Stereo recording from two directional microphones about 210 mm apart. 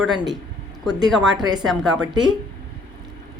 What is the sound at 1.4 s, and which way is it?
Speech, 20° right (ahead or behind).